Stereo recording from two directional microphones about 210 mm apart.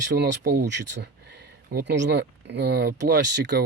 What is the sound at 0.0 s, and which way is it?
Speech, 55° right (ahead or behind).